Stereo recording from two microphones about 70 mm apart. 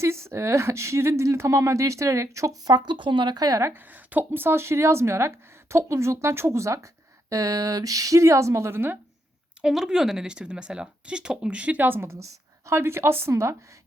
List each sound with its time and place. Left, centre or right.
0.0 s speech: right
2.6 s speech: right
3.9 s a woman's voice: right
7.3 s speech: right
9.6 s a woman's voice: centre; by 13.6 s right